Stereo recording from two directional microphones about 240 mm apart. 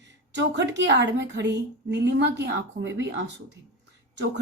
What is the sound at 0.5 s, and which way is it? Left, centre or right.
A woman's voice, right.